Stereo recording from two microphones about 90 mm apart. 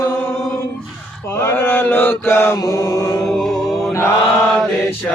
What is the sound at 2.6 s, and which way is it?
Mantra, 45° left (ahead or behind).